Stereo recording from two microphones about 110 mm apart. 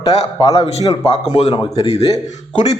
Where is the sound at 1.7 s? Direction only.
70° left (ahead or behind).